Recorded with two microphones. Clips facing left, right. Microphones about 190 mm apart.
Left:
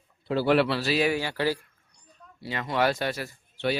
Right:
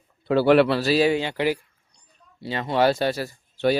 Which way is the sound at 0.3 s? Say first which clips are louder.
Right 6 dB; 65° right (ahead or behind).